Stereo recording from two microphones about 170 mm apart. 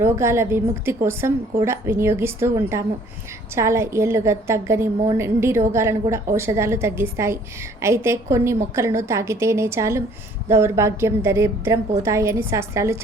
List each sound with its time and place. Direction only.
0.0 s a woman's voice: 15° right (ahead or behind)